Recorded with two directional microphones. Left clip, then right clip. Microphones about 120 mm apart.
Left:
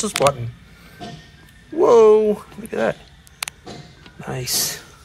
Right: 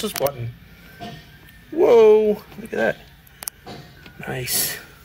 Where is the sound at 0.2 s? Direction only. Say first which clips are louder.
Left 7 dB; 15° left (ahead or behind).